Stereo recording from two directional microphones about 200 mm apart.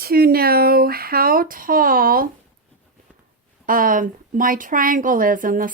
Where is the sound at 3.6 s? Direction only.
45° right (ahead or behind).